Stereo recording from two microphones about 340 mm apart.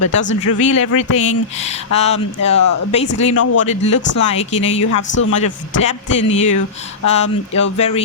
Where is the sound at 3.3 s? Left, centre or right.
Left.